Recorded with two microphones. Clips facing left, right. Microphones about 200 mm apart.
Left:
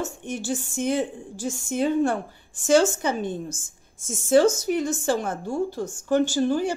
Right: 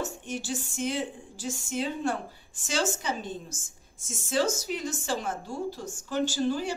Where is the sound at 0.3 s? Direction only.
50° left (ahead or behind).